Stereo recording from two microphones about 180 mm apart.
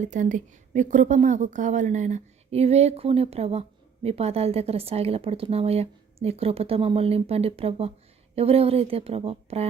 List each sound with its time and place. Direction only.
0.0 s a woman's voice: 45° right (ahead or behind)